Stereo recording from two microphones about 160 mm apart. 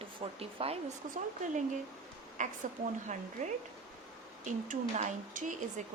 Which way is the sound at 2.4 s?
50° right (ahead or behind).